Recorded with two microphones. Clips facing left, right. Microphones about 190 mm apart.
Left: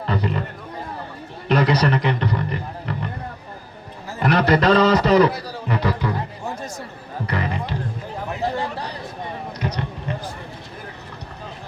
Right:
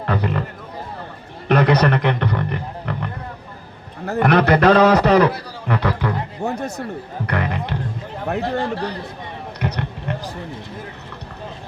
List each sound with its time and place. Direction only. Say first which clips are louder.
0.1 s music: right 2 dB; 60° right (ahead or behind)
1.5 s a sound: right 3 dB; 60° right (ahead or behind)
4.0 s a man's voice: right 4 dB; 60° right (ahead or behind)
9.6 s run: right 3 dB; 60° right (ahead or behind)